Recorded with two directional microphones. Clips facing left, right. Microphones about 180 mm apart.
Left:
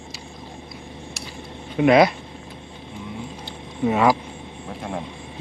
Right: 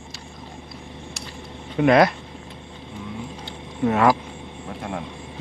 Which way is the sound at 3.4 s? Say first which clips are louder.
Even; 10° left (ahead or behind).